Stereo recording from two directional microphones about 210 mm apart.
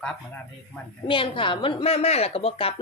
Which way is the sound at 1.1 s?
25° left (ahead or behind).